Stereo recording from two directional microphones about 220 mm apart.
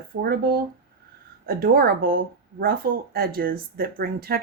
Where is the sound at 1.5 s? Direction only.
45° right (ahead or behind).